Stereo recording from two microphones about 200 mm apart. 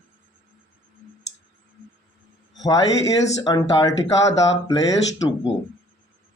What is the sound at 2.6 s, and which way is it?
Speech, 20° left (ahead or behind).